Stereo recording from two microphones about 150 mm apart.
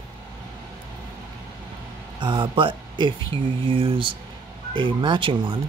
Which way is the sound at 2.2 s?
35° right (ahead or behind).